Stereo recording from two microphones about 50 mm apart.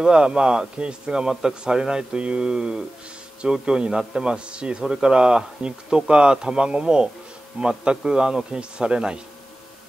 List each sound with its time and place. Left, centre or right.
0.0 s a man's voice: centre